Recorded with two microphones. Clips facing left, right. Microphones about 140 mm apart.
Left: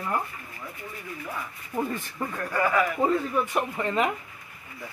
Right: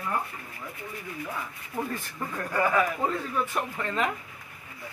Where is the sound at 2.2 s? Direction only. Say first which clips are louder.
Left 4 dB; 10° left (ahead or behind).